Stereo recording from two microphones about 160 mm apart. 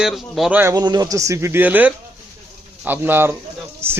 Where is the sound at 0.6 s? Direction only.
25° right (ahead or behind).